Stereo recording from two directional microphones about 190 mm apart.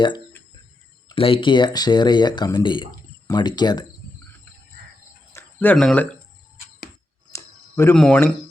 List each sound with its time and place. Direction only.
1.0 s speech: 30° left (ahead or behind)
5.3 s speech: 10° left (ahead or behind)
7.3 s a sound: 15° left (ahead or behind)
7.9 s speech: 5° left (ahead or behind)